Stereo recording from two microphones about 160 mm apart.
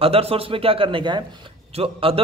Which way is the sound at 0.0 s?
40° right (ahead or behind).